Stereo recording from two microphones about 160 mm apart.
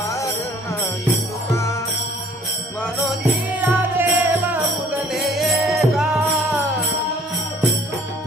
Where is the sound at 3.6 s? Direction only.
10° right (ahead or behind).